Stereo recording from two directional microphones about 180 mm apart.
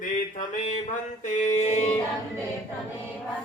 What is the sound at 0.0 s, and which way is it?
Mantra, 40° left (ahead or behind).